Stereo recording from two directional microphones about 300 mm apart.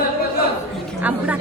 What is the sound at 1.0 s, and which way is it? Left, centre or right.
Speech, centre.